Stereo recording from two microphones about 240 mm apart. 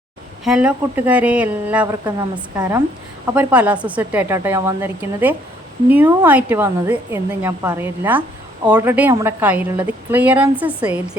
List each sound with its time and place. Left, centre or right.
0.4 s a woman's voice: centre